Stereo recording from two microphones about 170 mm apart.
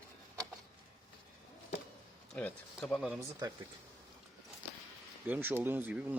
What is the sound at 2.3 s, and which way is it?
Speech, 5° left (ahead or behind).